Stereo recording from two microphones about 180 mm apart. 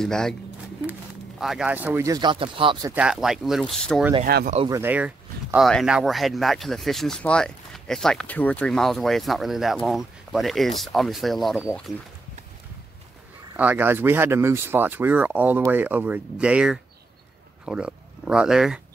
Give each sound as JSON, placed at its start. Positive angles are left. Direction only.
{"t": 0.0, "sound": "speech", "side_deg": 5}
{"t": 1.4, "sound": "speech", "side_deg": -5}
{"t": 2.9, "sound": "speech", "side_deg": -5}
{"t": 4.3, "sound": "speech", "side_deg": -60}
{"t": 4.6, "sound": "speech", "side_deg": -15}
{"t": 13.6, "sound": "speech", "side_deg": -10}